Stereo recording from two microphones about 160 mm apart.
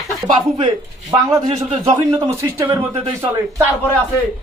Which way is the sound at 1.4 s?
45° right (ahead or behind).